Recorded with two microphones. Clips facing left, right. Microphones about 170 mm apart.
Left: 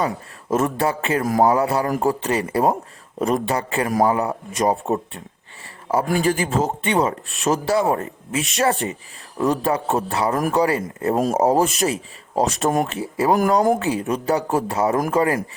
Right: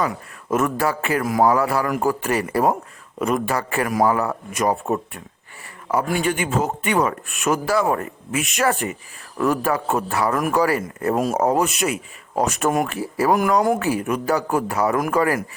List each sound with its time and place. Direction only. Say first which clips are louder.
0.0 s speech: left 1 dB; 25° left (ahead or behind)
3.2 s speech: left 1 dB; 40° left (ahead or behind)
3.4 s speech: left 1 dB; 20° left (ahead or behind)
6.1 s speech: left 2 dB; 35° left (ahead or behind)
11.4 s speech: left 2 dB; 30° left (ahead or behind)
12.4 s speech: left 1 dB; 25° left (ahead or behind)
13.3 s speech: left 2 dB; 35° left (ahead or behind)
13.7 s speech: even; 20° left (ahead or behind)